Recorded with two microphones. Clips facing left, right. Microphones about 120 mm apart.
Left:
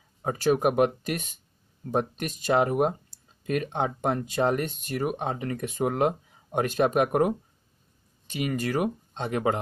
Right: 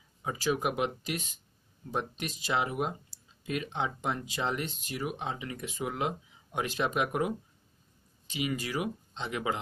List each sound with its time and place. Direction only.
0.2 s speech: 50° left (ahead or behind)